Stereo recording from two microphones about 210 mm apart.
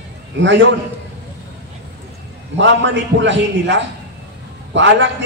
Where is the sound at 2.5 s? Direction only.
60° right (ahead or behind).